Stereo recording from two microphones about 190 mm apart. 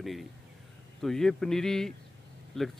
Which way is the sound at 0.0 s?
Centre (ahead or behind).